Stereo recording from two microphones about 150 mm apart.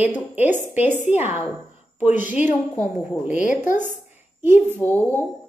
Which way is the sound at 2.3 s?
10° right (ahead or behind).